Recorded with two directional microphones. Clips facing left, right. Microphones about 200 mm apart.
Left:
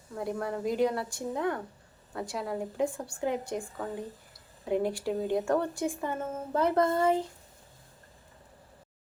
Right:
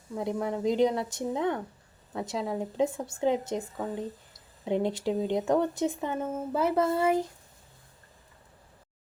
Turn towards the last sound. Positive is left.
turn(degrees=-10)  # may be behind; listen again after turning